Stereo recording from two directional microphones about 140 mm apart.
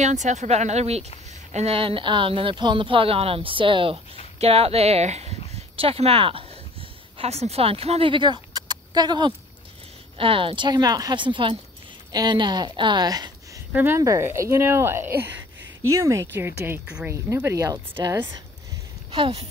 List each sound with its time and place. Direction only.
0.0 s speech: 60° right (ahead or behind)
5.5 s a sound: 45° right (ahead or behind); by 9.3 s 30° right (ahead or behind)
10.1 s speech: 40° right (ahead or behind)
13.7 s speech: 20° right (ahead or behind)
17.1 s speech: 20° right (ahead or behind); by 19.4 s 40° right (ahead or behind)